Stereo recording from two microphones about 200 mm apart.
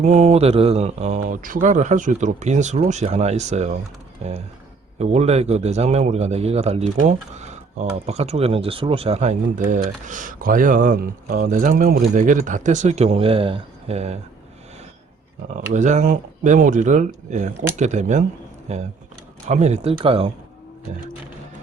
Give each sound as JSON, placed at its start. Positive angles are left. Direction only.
{"t": 0.0, "sound": "speech", "side_deg": -35}
{"t": 15.5, "sound": "speech", "side_deg": -35}